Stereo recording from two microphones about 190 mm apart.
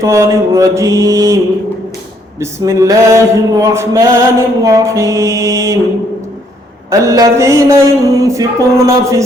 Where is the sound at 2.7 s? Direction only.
15° right (ahead or behind).